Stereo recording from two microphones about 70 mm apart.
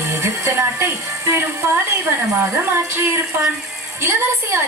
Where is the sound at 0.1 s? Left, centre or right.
Right.